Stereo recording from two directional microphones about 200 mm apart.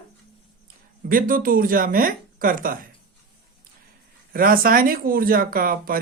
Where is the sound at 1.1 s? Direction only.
45° right (ahead or behind).